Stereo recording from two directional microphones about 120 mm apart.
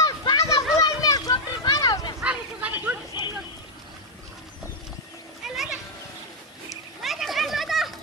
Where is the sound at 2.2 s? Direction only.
10° right (ahead or behind).